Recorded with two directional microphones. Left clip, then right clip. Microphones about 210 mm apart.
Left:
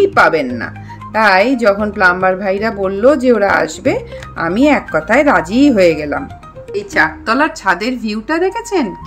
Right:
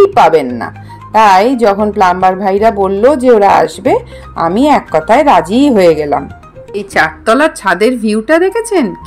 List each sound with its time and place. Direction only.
1.1 s a woman's voice: 10° right (ahead or behind)